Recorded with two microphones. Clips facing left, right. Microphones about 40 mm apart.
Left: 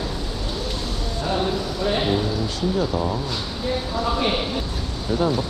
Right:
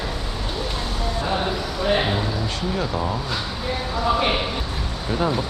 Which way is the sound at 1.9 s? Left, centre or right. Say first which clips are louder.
Even; centre.